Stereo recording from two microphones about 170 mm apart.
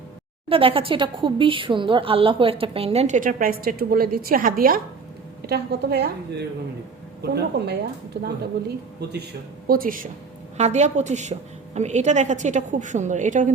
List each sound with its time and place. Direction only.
0.4 s speech: 35° right (ahead or behind); by 4.8 s 55° right (ahead or behind)
5.5 s a woman's voice: 70° right (ahead or behind)
7.2 s a woman's voice: 75° right (ahead or behind)
9.6 s speech: 55° right (ahead or behind)
10.6 s a woman's voice: 40° right (ahead or behind)